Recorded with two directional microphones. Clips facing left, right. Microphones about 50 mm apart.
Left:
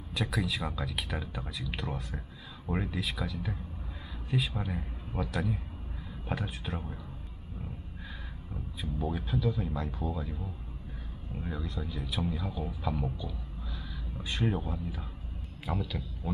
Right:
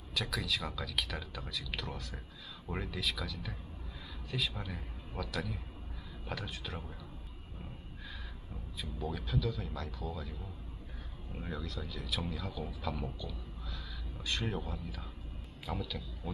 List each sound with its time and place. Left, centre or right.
0.1 s a man's voice: centre
8.8 s speech: centre
11.5 s speech: centre